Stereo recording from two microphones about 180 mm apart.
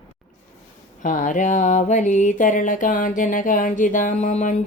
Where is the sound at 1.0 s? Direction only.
45° left (ahead or behind).